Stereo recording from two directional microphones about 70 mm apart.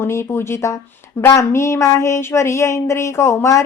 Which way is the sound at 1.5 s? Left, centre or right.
Left.